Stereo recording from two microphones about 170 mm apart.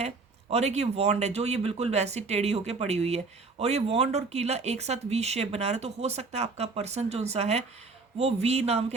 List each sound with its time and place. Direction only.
0.5 s speech: 40° right (ahead or behind)